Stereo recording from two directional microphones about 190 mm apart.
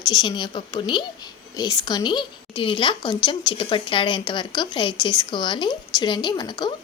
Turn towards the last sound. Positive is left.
turn(degrees=25)  # may be behind; listen again after turning